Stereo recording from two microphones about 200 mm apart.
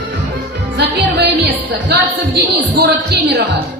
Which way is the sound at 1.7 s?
60° right (ahead or behind).